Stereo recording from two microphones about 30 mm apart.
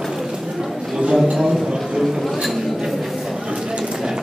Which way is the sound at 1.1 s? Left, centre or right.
Centre.